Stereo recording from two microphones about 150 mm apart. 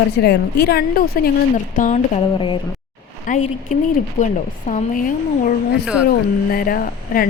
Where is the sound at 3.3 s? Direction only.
60° left (ahead or behind).